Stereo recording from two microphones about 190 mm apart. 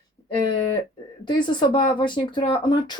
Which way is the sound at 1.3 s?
25° left (ahead or behind).